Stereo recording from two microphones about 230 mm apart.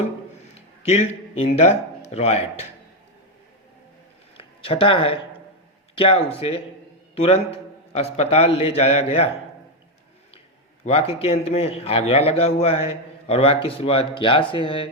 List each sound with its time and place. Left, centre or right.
0.8 s a man's voice: left
4.4 s speech: left
10.8 s speech: left